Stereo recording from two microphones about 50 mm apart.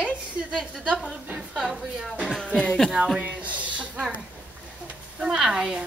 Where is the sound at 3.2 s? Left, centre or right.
Right.